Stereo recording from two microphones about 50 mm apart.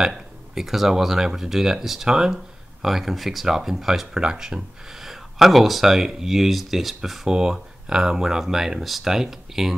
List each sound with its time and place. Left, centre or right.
0.0 s speech: centre